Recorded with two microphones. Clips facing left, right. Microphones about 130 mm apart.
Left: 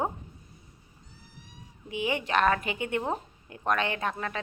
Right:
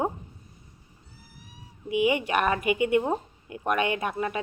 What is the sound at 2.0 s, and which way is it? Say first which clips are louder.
Speech: right 1 dB; 10° right (ahead or behind).